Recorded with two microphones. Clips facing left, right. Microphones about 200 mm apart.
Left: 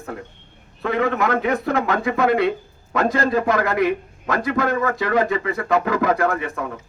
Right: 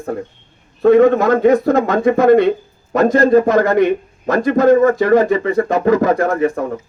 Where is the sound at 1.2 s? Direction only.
45° right (ahead or behind).